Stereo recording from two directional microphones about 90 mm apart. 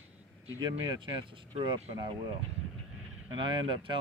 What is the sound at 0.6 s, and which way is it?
Speech, 60° right (ahead or behind).